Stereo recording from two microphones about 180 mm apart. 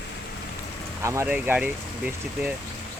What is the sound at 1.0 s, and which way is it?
Speech, 15° right (ahead or behind).